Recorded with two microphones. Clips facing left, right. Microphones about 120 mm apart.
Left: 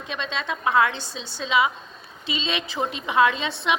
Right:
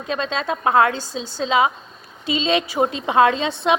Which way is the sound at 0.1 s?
35° right (ahead or behind).